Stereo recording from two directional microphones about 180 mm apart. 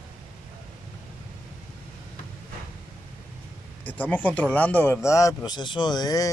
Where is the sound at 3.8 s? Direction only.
10° left (ahead or behind).